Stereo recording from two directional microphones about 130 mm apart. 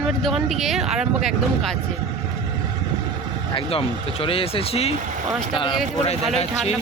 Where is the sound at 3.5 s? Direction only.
45° left (ahead or behind).